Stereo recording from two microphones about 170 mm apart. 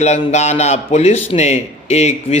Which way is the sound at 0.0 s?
40° left (ahead or behind).